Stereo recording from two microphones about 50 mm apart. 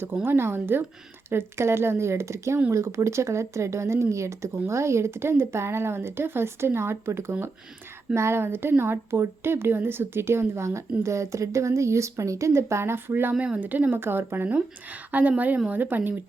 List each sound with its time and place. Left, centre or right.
0.0 s speech: right
1.3 s a woman's voice: right
13.6 s a woman's voice: right
14.0 s speech: right
15.1 s a woman's voice: right